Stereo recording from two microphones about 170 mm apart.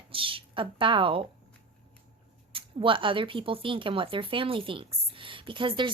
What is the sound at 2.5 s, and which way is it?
A woman's voice, 30° right (ahead or behind).